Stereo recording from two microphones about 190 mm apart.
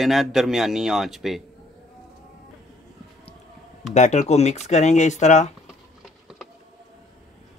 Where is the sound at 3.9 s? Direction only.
40° left (ahead or behind).